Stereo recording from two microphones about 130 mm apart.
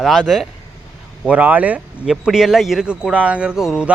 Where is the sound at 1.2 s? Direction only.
10° right (ahead or behind).